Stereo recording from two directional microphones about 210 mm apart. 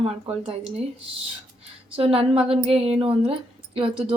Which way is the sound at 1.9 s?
25° right (ahead or behind).